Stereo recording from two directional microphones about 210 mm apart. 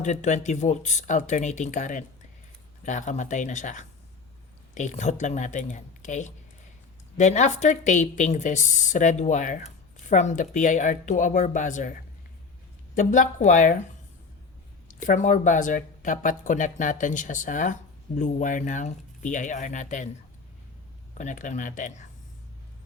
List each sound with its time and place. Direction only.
0.0 s speech: 35° left (ahead or behind)
14.8 s speech: 35° left (ahead or behind)
21.2 s speech: 35° left (ahead or behind)